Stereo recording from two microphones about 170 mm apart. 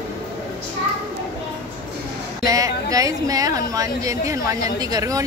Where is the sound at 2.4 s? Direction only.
20° right (ahead or behind).